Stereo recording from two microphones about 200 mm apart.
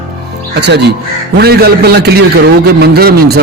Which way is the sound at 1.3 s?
55° right (ahead or behind).